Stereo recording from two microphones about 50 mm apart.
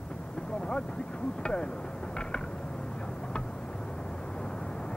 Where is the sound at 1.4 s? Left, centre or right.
Centre.